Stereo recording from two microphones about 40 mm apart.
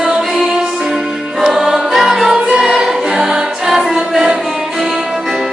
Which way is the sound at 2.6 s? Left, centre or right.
Centre.